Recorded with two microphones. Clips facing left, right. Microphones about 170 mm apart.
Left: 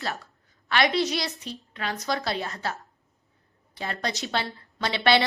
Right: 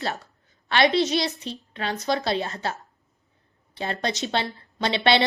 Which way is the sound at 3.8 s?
25° right (ahead or behind).